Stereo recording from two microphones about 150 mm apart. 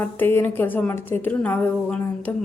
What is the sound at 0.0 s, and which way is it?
A woman's voice, 15° left (ahead or behind).